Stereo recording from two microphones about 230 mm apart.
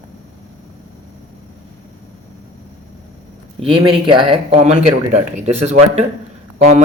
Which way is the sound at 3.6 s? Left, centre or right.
Right.